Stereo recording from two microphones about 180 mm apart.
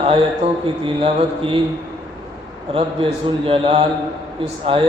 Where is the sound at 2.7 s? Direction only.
30° right (ahead or behind).